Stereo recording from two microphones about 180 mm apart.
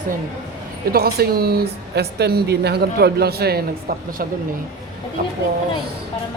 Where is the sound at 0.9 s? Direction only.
60° right (ahead or behind).